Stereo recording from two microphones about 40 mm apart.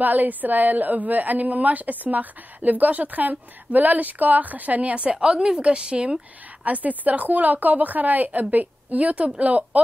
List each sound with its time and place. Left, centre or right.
0.0 s a woman's voice: right
5.1 s a woman's voice: right
6.6 s a woman's voice: right